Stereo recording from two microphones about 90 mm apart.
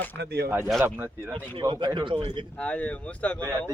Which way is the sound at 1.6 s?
55° right (ahead or behind).